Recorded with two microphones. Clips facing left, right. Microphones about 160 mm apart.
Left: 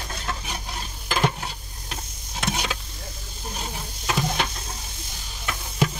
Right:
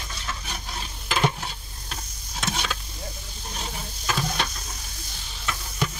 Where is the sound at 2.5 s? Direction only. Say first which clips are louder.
Left 2 dB; 15° left (ahead or behind).